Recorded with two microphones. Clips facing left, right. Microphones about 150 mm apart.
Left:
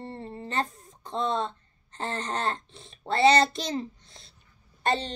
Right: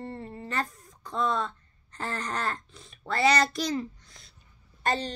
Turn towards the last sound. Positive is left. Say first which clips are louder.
# left 2 dB
turn(degrees=25)  # may be behind; listen again after turning